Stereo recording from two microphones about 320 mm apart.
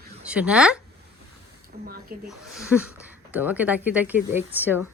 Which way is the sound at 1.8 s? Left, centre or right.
Right.